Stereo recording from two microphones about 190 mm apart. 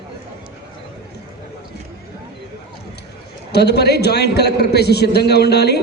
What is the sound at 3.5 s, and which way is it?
A man's voice, 60° left (ahead or behind).